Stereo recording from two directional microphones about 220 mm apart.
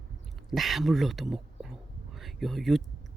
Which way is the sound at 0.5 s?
Centre (ahead or behind).